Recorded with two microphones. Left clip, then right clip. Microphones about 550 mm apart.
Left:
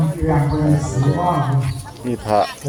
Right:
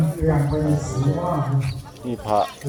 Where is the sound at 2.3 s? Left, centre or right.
Right.